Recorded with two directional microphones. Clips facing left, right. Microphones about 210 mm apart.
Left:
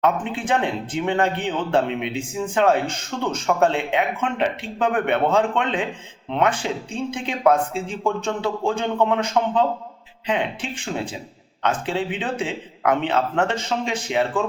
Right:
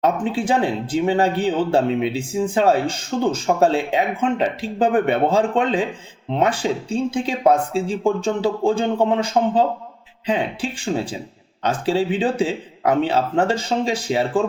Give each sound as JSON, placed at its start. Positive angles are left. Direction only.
{"t": 0.0, "sound": "speech", "side_deg": -35}